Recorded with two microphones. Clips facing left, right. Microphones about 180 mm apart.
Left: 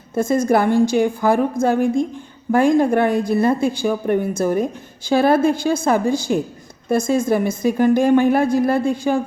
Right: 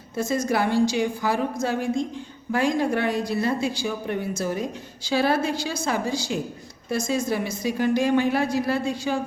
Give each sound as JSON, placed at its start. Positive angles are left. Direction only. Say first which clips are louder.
{"t": 0.1, "sound": "a woman's voice", "louder": "left 8 dB", "side_deg": 55}